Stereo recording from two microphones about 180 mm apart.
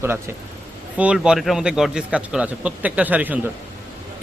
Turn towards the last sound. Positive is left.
turn(degrees=-10)  # may be behind; listen again after turning